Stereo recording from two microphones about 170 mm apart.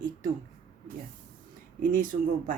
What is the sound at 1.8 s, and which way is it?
Speech, 55° right (ahead or behind).